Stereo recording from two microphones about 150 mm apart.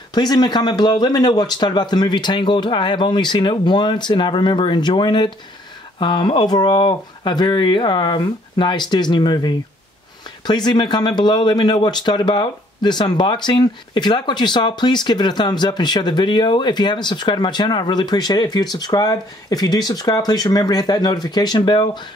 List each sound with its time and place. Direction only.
0.1 s speech: 25° left (ahead or behind)